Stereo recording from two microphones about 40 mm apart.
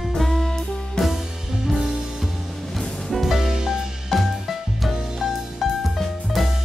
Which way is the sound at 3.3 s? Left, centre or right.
Centre.